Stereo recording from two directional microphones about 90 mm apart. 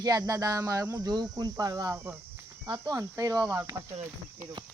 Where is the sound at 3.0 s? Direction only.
40° right (ahead or behind).